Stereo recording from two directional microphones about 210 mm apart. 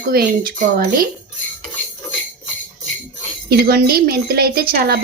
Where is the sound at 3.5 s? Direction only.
45° right (ahead or behind).